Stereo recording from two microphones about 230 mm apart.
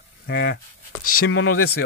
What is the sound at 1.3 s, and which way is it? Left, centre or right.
Speech, left.